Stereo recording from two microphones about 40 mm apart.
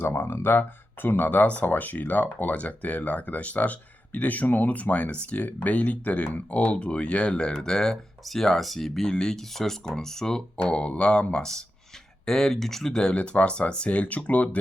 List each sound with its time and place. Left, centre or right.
0.0 s speech: left
1.5 s speech: left; by 10.4 s centre
10.7 s speech: left
12.2 s speech: centre
13.0 s speech: left